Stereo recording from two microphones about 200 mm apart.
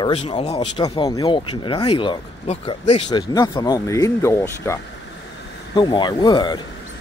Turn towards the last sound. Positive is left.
turn(degrees=20)  # may be behind; listen again after turning